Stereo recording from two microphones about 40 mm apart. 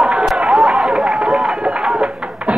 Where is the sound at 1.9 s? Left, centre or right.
Right.